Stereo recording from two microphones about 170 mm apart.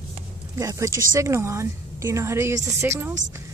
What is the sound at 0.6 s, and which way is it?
A woman's voice, 20° right (ahead or behind).